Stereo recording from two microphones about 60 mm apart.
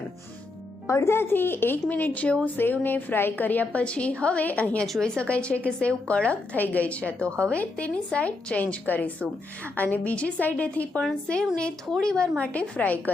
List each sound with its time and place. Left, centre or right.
0.9 s speech: left